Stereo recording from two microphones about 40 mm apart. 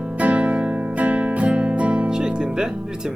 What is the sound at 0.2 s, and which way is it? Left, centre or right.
Music, right.